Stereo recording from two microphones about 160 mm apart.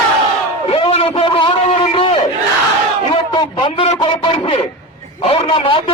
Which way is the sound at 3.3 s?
30° left (ahead or behind).